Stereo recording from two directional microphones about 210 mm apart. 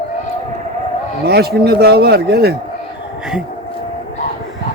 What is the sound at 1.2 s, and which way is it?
Speech, 50° right (ahead or behind).